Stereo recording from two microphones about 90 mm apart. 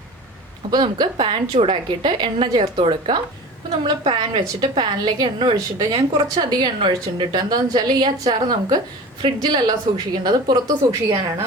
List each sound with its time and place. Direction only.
0.7 s a woman's voice: 50° right (ahead or behind)
1.1 s a woman's voice: 75° right (ahead or behind); by 10.6 s 50° right (ahead or behind)
10.9 s a woman's voice: 30° right (ahead or behind)